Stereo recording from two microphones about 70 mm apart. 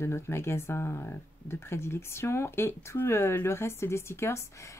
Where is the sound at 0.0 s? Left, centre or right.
Left.